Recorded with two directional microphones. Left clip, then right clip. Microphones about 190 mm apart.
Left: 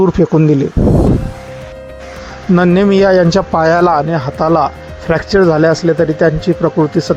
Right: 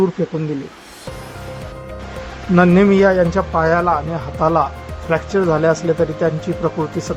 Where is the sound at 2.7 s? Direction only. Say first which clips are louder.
Left 5 dB; 40° left (ahead or behind).